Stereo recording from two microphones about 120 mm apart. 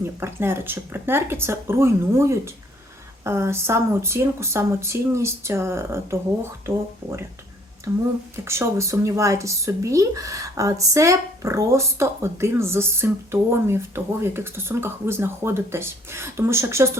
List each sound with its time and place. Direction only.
0.2 s speech: 20° right (ahead or behind)